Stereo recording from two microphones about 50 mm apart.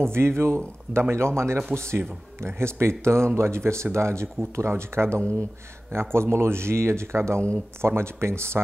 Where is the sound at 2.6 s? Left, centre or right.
Right.